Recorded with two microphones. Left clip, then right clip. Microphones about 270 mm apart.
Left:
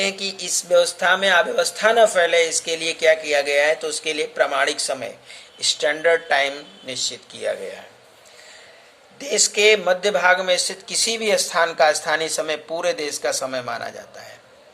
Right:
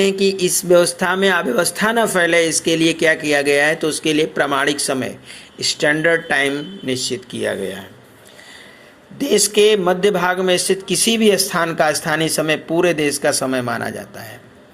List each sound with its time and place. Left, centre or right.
0.0 s a man's voice: right
9.1 s a man's voice: centre